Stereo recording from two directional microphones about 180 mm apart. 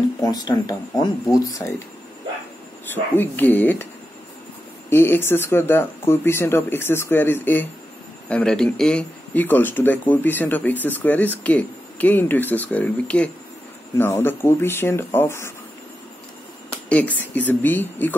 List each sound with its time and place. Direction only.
0.2 s speech: 20° left (ahead or behind)
2.9 s speech: 10° left (ahead or behind)
4.8 s speech: 10° left (ahead or behind)
16.9 s speech: 10° left (ahead or behind)